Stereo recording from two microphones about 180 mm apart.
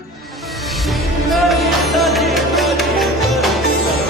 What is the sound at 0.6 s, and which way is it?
Music, centre (ahead or behind).